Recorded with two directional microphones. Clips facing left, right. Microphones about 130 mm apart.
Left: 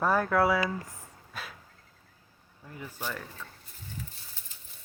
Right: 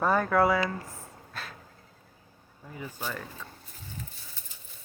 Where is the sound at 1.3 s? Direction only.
10° left (ahead or behind).